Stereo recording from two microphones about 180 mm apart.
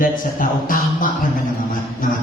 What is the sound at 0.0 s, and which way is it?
Speech, 50° left (ahead or behind).